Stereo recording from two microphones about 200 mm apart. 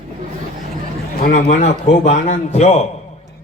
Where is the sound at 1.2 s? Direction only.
40° left (ahead or behind).